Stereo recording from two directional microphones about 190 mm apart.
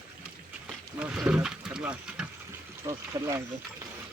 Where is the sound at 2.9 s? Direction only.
15° right (ahead or behind).